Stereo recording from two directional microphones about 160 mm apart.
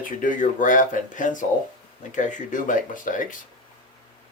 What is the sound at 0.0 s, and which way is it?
Speech, 55° left (ahead or behind).